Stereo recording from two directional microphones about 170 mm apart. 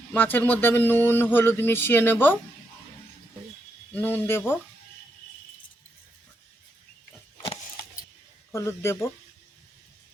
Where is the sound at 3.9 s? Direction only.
10° left (ahead or behind).